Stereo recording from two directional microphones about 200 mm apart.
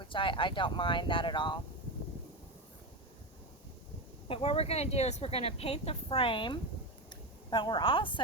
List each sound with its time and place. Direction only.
0.0 s speech: 25° left (ahead or behind)
4.3 s speech: 25° left (ahead or behind)